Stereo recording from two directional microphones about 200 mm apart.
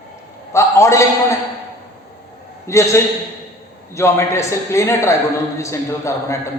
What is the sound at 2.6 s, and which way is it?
A man's voice, 15° left (ahead or behind).